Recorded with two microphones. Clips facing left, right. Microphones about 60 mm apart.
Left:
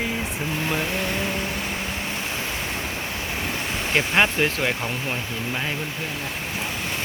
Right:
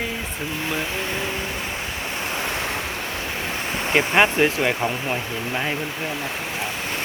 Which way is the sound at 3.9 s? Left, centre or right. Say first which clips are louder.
Right 3 dB; centre.